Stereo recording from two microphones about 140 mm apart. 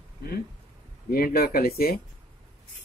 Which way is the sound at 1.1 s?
90° left.